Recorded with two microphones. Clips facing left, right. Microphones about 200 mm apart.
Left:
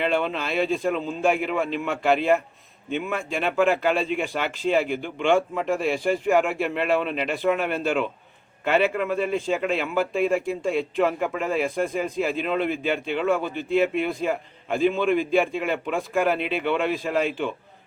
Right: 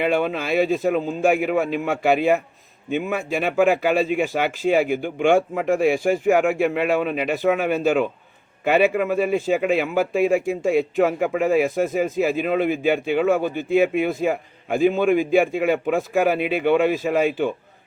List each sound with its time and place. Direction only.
0.0 s a man's voice: 10° right (ahead or behind)
5.0 s speech: 50° right (ahead or behind)
6.2 s a man's voice: 5° right (ahead or behind)